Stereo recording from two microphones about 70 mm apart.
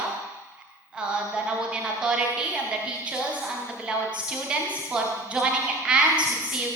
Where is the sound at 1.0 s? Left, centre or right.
Centre.